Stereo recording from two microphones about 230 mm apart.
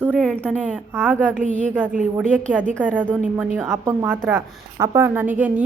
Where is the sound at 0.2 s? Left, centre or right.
Centre.